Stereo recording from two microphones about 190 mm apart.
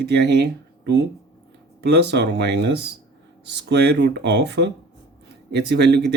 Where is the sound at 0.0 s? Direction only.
60° right (ahead or behind).